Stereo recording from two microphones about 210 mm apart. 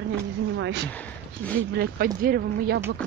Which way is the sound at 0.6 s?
55° right (ahead or behind).